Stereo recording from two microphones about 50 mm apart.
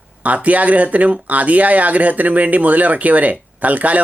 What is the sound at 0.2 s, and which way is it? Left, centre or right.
Speech, right.